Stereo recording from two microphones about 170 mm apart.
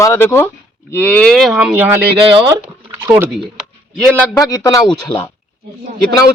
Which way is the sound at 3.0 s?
15° right (ahead or behind).